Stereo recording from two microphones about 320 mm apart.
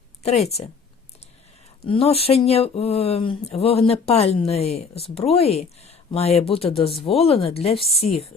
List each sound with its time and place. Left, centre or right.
0.2 s speech: centre
1.9 s speech: centre